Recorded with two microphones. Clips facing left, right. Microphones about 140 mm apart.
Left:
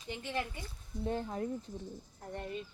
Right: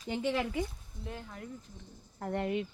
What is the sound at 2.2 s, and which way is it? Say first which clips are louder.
Speech: right 9 dB; 90° right.